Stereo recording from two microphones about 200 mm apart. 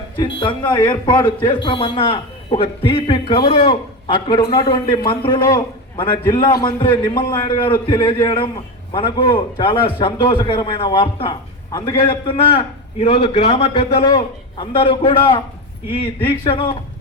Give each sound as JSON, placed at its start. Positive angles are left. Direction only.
{"t": 0.3, "sound": "a man's voice", "side_deg": 25}